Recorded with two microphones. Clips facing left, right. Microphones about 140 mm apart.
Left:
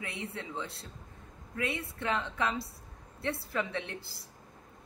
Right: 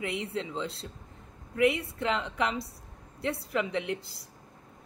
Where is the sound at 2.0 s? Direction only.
20° right (ahead or behind).